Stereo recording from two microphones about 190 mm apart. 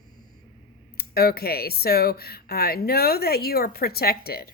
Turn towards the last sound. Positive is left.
turn(degrees=55)  # may be behind; listen again after turning